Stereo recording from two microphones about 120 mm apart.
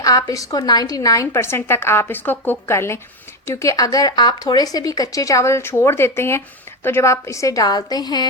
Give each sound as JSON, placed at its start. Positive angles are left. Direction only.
{"t": 0.0, "sound": "a woman's voice", "side_deg": 30}